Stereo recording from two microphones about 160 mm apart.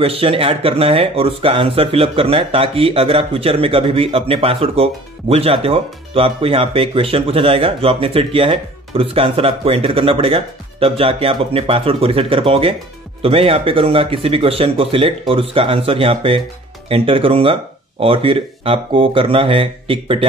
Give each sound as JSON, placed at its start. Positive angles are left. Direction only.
{"t": 0.0, "sound": "speech", "side_deg": -35}